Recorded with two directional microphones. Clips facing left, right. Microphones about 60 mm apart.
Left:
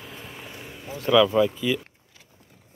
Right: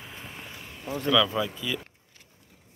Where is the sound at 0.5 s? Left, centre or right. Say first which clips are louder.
Right 4 dB; centre.